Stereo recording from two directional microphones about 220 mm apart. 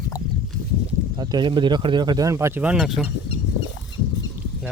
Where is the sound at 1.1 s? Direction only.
20° right (ahead or behind); by 3.1 s centre (ahead or behind).